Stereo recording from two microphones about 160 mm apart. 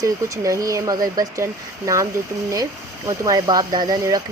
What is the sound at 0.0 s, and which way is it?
Speech, 20° right (ahead or behind).